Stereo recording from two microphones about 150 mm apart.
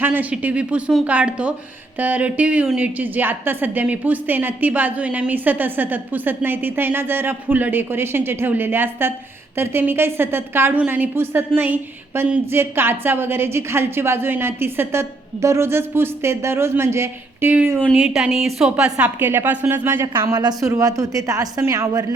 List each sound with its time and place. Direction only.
0.0 s a woman's voice: 10° right (ahead or behind)
20.3 s a woman's voice: 25° right (ahead or behind)